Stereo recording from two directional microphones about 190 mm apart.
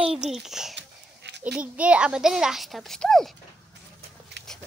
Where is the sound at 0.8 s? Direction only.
65° right (ahead or behind).